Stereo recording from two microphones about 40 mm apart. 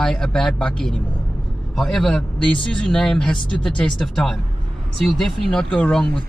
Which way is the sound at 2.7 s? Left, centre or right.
Centre.